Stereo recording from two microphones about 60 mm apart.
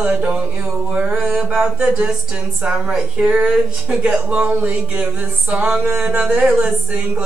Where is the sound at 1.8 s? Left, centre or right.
Centre.